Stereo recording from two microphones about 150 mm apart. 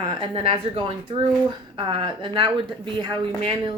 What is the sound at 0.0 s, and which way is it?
Speech, 35° right (ahead or behind).